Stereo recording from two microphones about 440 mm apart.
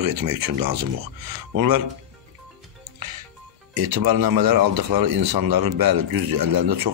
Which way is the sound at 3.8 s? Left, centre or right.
Right.